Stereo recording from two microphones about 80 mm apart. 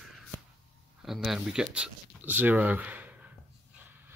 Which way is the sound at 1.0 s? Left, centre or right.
Centre.